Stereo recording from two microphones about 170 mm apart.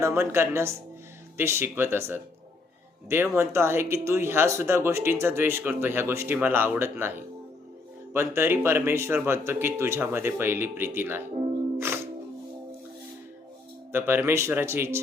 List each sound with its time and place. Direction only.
0.0 s speech: 15° right (ahead or behind)
8.1 s speech: 15° right (ahead or behind)
13.9 s speech: 15° right (ahead or behind)